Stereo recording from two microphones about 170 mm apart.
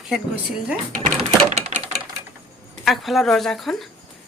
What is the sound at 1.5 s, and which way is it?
Typewriter, 40° right (ahead or behind).